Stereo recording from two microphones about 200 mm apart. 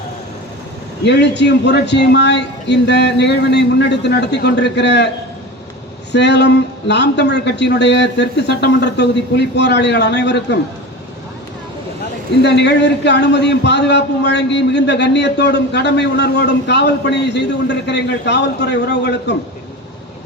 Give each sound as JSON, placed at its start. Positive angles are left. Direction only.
{"t": 1.0, "sound": "a man's voice", "side_deg": 60}
{"t": 6.1, "sound": "a man's voice", "side_deg": 60}
{"t": 12.4, "sound": "a man's voice", "side_deg": 60}